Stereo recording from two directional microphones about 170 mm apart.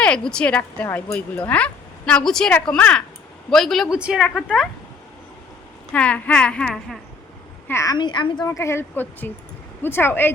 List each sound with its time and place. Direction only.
0.0 s a woman's voice: 5° left (ahead or behind)
5.9 s speech: 10° left (ahead or behind)
7.7 s speech: 20° left (ahead or behind)